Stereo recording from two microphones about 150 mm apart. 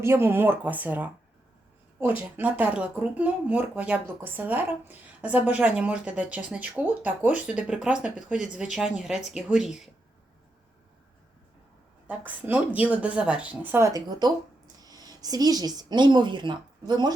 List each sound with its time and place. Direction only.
0.0 s speech: 15° right (ahead or behind)
12.0 s a woman's voice: 10° right (ahead or behind); by 17.2 s 30° right (ahead or behind)